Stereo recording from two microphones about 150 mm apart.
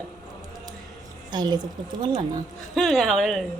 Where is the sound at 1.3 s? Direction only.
30° right (ahead or behind).